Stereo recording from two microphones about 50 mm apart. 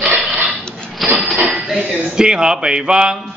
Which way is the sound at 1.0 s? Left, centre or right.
Centre.